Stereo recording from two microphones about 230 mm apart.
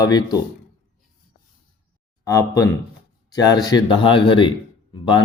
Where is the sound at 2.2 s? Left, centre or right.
Centre.